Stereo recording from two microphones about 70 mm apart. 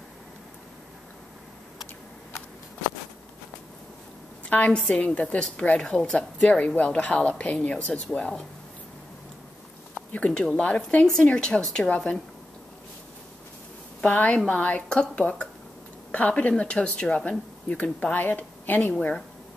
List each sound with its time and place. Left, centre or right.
4.5 s a woman's voice: left
9.9 s a sound: centre
10.5 s a woman's voice: centre
14.0 s a woman's voice: left